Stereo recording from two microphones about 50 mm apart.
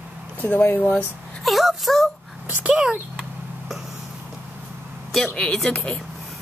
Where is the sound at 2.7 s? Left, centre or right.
Centre.